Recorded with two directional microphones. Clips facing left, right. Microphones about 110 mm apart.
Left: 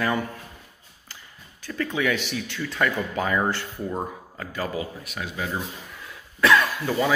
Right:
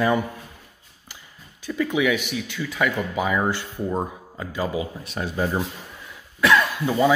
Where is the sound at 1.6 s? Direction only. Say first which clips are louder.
Right 4 dB; 10° right (ahead or behind).